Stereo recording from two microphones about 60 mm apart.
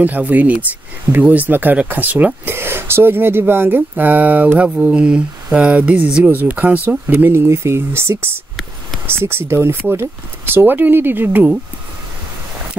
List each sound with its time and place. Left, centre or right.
0.0 s speech: right
2.5 s speech: right
7.3 s speech: right